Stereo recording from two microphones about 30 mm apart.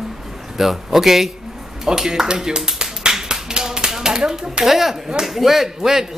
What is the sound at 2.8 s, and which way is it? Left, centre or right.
Finger snapping, right.